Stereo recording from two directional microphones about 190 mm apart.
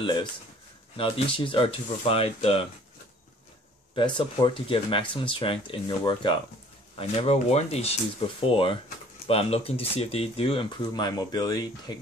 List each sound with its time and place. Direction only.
0.0 s speech: 25° left (ahead or behind)
3.9 s speech: 25° left (ahead or behind)